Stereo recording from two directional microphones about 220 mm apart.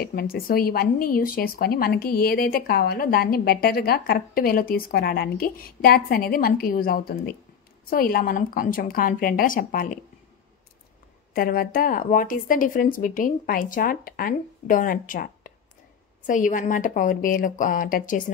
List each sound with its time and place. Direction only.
0.0 s speech: 45° left (ahead or behind)
11.3 s speech: 40° left (ahead or behind)